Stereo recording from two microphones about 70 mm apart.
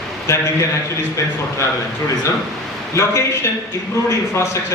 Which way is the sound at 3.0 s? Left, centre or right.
Left.